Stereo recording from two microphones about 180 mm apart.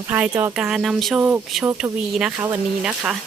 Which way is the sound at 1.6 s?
15° right (ahead or behind).